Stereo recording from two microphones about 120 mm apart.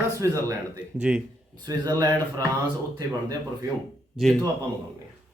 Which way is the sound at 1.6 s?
30° right (ahead or behind).